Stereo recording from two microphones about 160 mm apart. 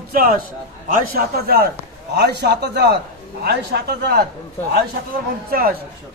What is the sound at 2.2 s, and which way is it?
A man's voice, 90° right.